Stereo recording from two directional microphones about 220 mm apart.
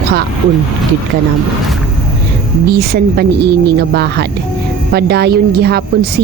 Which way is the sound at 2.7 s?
45° right (ahead or behind).